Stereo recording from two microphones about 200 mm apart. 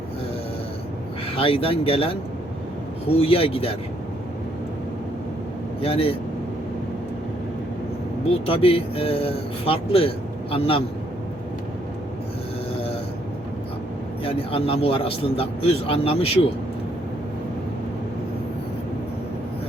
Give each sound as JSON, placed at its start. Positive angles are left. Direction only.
{"t": 1.4, "sound": "speech", "side_deg": 25}
{"t": 5.8, "sound": "speech", "side_deg": 30}
{"t": 8.3, "sound": "speech", "side_deg": 30}
{"t": 14.3, "sound": "speech", "side_deg": 30}